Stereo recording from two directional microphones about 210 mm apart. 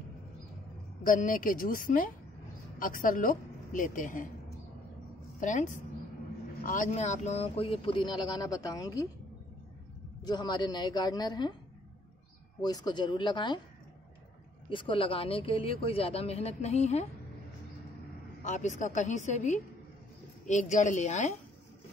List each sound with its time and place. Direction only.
1.0 s a woman's voice: 40° left (ahead or behind)
5.4 s a woman's voice: 35° left (ahead or behind); by 9.0 s 15° left (ahead or behind)
10.2 s speech: 20° left (ahead or behind)
12.6 s speech: 20° left (ahead or behind)
14.7 s speech: 25° left (ahead or behind)
18.4 s a woman's voice: 35° left (ahead or behind)